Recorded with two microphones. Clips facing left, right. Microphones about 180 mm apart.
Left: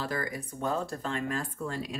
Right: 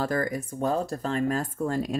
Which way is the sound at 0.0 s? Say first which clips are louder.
Right 7 dB; 45° right (ahead or behind).